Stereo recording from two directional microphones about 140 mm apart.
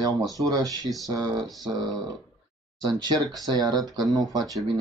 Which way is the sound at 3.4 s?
30° right (ahead or behind).